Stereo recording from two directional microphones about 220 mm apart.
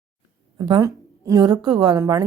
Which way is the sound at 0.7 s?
15° right (ahead or behind).